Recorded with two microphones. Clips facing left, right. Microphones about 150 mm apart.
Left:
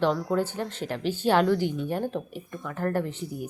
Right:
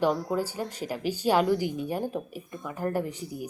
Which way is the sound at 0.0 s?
10° right (ahead or behind).